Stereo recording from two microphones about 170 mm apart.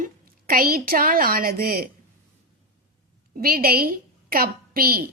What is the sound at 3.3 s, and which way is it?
A woman's voice, 60° right (ahead or behind).